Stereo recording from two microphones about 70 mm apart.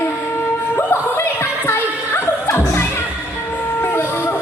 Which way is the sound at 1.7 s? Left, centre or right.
Left.